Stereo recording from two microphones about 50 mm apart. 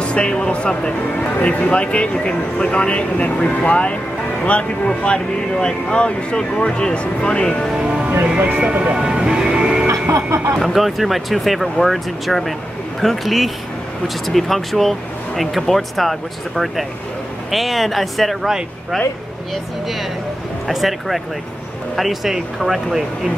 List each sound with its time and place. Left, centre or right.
0.0 s speech: left
8.1 s speech: right
8.9 s speech: centre
10.1 s speech: right
10.6 s speech: centre